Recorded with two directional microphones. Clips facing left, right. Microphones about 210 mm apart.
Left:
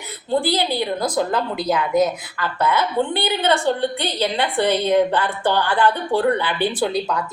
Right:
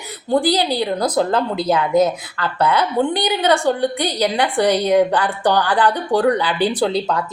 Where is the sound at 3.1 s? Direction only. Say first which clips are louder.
Right 2 dB; 15° right (ahead or behind).